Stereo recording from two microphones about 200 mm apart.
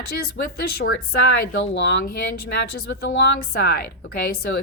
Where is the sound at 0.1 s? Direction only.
50° left (ahead or behind).